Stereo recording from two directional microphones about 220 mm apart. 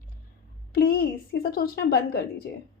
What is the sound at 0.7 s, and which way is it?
A woman's voice, 45° left (ahead or behind).